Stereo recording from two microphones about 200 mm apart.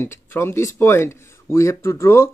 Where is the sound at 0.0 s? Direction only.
10° left (ahead or behind).